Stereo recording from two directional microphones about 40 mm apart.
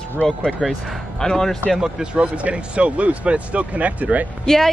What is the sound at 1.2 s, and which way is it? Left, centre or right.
Speech, centre.